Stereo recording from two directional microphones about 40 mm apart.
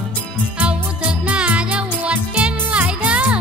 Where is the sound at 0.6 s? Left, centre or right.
Right.